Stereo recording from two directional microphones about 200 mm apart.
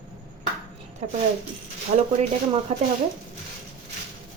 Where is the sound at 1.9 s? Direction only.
35° right (ahead or behind).